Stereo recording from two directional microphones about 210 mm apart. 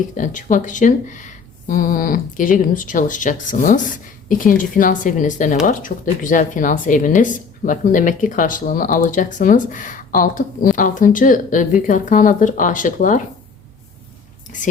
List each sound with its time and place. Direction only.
0.1 s speech: 35° left (ahead or behind)